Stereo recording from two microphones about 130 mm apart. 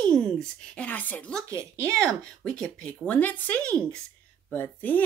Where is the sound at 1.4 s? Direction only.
25° right (ahead or behind).